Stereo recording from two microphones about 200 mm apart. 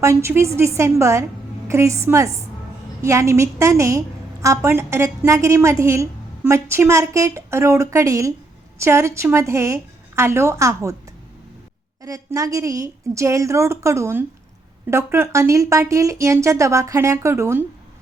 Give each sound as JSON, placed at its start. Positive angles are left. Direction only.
{"t": 0.0, "sound": "a woman's voice", "side_deg": -15}
{"t": 12.0, "sound": "a woman's voice", "side_deg": -15}